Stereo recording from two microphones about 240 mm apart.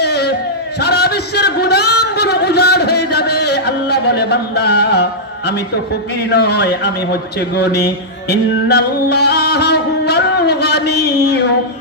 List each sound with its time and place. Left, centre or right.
0.0 s a sound: left
6.3 s speech: left
8.3 s music: left